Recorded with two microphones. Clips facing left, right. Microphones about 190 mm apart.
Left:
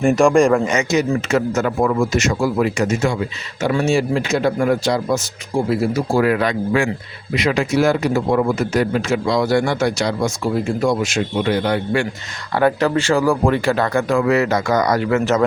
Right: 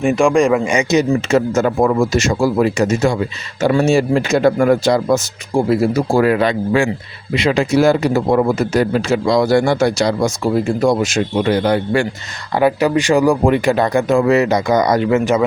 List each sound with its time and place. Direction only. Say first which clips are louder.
0.0 s speech: even; centre (ahead or behind)
0.6 s a man's voice: right 3 dB; 15° right (ahead or behind); by 5.2 s 50° right (ahead or behind)
6.1 s a man's voice: right 2 dB; 30° right (ahead or behind)
12.5 s speech: right 2 dB; 10° right (ahead or behind)